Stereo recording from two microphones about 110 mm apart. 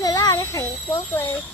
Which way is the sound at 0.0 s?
35° left (ahead or behind).